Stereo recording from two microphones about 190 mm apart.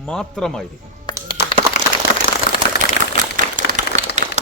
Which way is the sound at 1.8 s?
40° left (ahead or behind).